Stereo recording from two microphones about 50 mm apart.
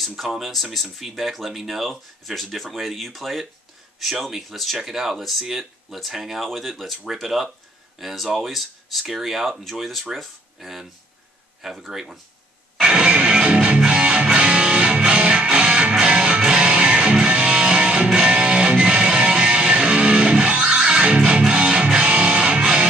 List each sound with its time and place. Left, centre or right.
0.0 s speech: centre
12.8 s music: centre